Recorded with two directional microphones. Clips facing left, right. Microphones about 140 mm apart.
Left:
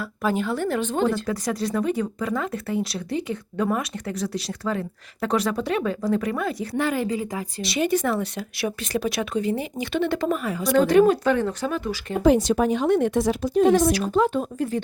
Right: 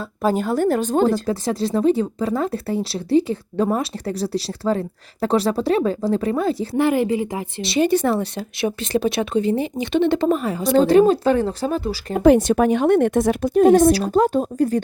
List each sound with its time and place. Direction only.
0.0 s a woman's voice: 35° right (ahead or behind)
12.2 s speech: 55° right (ahead or behind)
13.9 s a woman's voice: 35° right (ahead or behind)